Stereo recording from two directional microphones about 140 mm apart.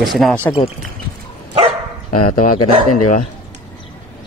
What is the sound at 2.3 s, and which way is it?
Speech, 85° left.